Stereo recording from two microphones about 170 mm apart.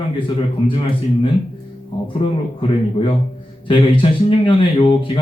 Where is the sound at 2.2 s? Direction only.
30° left (ahead or behind).